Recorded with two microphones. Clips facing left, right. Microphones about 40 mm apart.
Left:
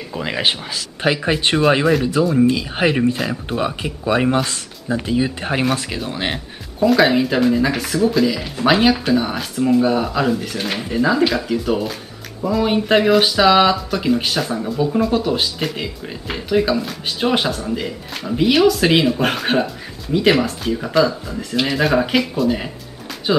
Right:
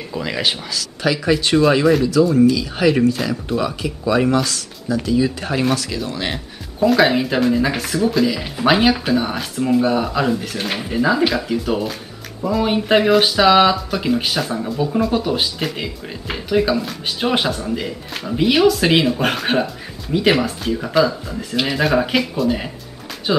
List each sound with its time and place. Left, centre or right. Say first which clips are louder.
0.1 s speech: left 1 dB; centre
6.8 s speech: left 1 dB; centre